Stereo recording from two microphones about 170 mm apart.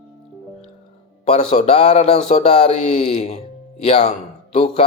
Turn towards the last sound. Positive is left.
turn(degrees=35)  # may be behind; listen again after turning